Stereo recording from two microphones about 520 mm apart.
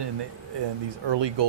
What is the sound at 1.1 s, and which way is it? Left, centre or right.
Speech, right.